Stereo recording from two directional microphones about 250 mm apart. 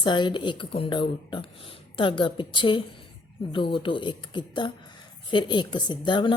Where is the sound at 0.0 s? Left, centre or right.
Centre.